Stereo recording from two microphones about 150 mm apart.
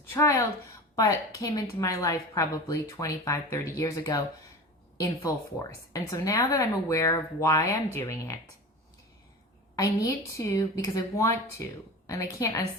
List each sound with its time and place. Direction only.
0.1 s a woman's voice: 20° left (ahead or behind)
5.9 s a woman's voice: 20° left (ahead or behind)
9.7 s a woman's voice: 25° left (ahead or behind)